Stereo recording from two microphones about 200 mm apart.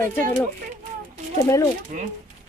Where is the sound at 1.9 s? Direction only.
45° right (ahead or behind).